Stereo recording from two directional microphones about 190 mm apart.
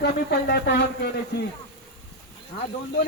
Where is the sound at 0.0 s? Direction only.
60° left (ahead or behind).